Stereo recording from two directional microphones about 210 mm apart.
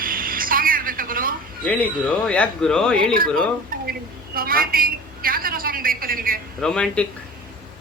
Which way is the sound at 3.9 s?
45° right (ahead or behind).